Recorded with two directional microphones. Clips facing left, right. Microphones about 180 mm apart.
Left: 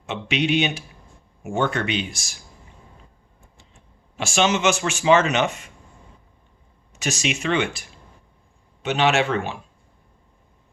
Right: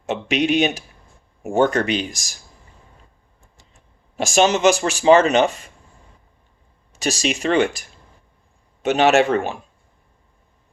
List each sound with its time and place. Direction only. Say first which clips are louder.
0.0 s a man's voice: right 4 dB; 40° right (ahead or behind)
4.2 s a man's voice: right 5 dB; 40° right (ahead or behind)
6.9 s a man's voice: right 3 dB; 35° right (ahead or behind)